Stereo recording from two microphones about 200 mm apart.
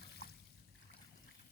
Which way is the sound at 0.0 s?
55° left (ahead or behind).